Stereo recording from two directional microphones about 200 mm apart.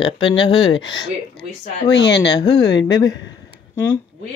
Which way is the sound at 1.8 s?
60° left (ahead or behind).